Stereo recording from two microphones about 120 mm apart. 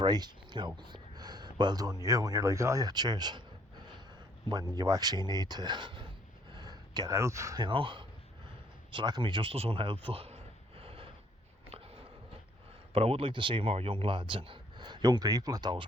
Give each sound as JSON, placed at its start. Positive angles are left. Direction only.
{"t": 0.0, "sound": "speech", "side_deg": -35}
{"t": 4.4, "sound": "speech", "side_deg": -35}
{"t": 6.5, "sound": "a sound", "side_deg": -35}
{"t": 7.6, "sound": "speech", "side_deg": -45}
{"t": 12.9, "sound": "speech", "side_deg": -55}